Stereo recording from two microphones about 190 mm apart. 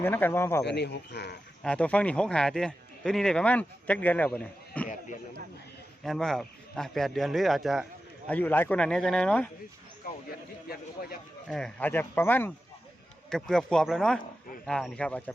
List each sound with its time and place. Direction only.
0.0 s speech: 10° left (ahead or behind)
0.6 s speech: 60° left (ahead or behind)
1.6 s a man's voice: 5° left (ahead or behind)
6.0 s a man's voice: centre (ahead or behind)
10.0 s a sound: 50° left (ahead or behind)
11.4 s a man's voice: 5° left (ahead or behind)